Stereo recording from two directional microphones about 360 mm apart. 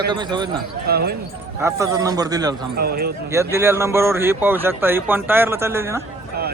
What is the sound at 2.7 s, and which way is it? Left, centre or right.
Speech, right.